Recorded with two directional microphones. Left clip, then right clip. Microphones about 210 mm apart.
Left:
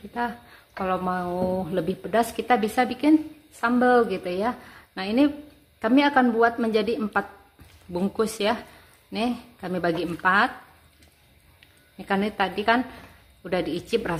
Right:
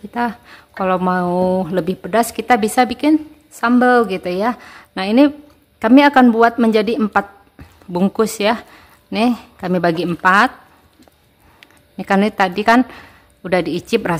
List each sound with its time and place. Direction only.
0.1 s speech: 40° right (ahead or behind)
11.6 s speech: 35° right (ahead or behind)